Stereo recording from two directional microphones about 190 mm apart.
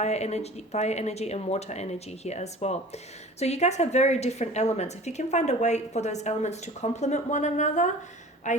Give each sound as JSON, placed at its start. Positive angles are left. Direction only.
{"t": 0.0, "sound": "a woman's voice", "side_deg": 35}